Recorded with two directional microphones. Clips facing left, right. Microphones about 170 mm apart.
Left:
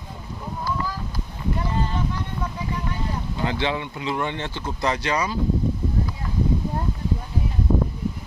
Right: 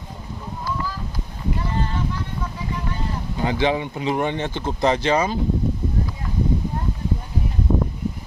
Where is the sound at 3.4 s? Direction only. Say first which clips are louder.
Right 5 dB; 15° right (ahead or behind).